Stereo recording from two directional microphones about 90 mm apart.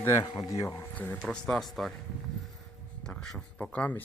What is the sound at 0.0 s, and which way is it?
Speech, 30° left (ahead or behind).